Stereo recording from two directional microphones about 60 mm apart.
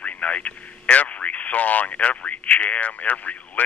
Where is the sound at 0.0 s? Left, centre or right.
Left.